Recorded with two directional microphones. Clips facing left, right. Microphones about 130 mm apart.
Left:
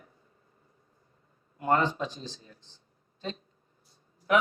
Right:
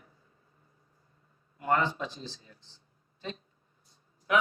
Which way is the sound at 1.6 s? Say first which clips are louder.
Left 2 dB; 25° left (ahead or behind).